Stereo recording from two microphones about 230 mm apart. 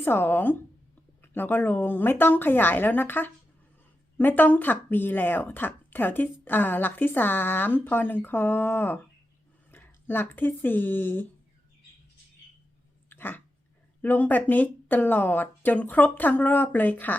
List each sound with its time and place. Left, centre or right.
0.0 s speech: centre
13.1 s dog: centre
14.0 s speech: centre